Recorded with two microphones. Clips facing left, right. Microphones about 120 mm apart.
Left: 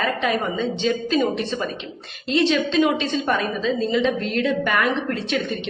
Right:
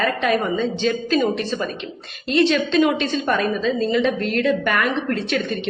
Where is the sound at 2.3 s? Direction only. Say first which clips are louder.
Right 2 dB; 20° left (ahead or behind).